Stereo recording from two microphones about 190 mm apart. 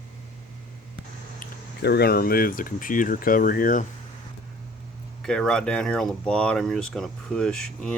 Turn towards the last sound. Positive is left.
turn(degrees=5)  # may be behind; listen again after turning